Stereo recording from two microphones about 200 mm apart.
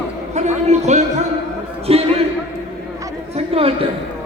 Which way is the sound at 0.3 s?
35° right (ahead or behind).